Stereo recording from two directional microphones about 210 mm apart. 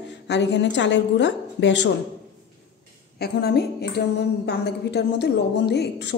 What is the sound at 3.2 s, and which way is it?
A woman's voice, 50° left (ahead or behind).